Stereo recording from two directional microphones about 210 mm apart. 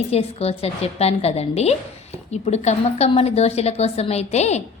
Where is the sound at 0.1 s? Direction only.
30° left (ahead or behind).